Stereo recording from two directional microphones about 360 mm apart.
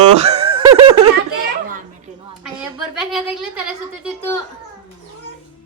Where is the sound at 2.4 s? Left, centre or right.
Centre.